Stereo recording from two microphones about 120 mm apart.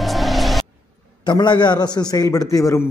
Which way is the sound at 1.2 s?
40° left (ahead or behind).